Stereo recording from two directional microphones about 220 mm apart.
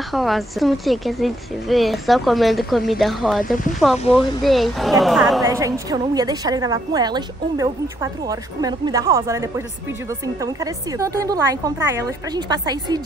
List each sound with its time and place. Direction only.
0.1 s a woman's voice: centre (ahead or behind)
5.4 s a woman's voice: 15° right (ahead or behind)